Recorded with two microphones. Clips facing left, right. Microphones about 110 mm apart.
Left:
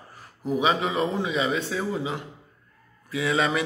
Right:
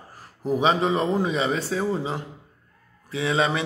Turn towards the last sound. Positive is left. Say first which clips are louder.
# right 1 dB
turn(degrees=-25)  # may be behind; listen again after turning